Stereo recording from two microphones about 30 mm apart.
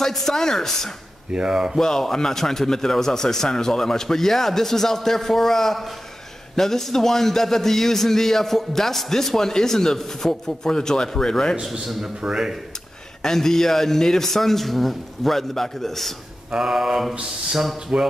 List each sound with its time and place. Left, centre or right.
0.0 s a man's voice: centre
1.5 s speech: right
1.8 s a man's voice: centre
12.3 s speech: centre
13.2 s a man's voice: centre
16.5 s mantra: centre
17.9 s speech: right